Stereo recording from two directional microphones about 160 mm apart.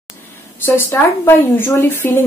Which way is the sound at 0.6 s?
15° left (ahead or behind).